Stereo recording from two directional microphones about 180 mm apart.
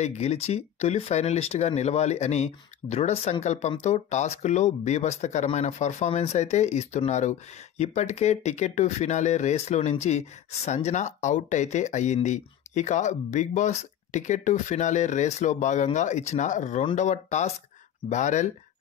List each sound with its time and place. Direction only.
0.0 s speech: 35° left (ahead or behind)